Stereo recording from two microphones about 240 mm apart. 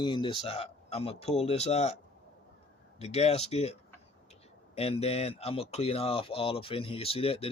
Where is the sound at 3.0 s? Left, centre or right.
Left.